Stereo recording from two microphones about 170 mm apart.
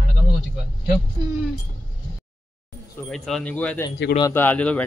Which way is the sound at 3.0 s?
Centre (ahead or behind).